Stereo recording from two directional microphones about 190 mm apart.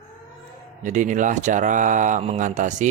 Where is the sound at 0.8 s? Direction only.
40° right (ahead or behind).